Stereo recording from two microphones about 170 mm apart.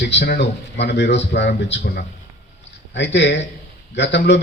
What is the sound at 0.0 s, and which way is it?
A man's voice, 80° left.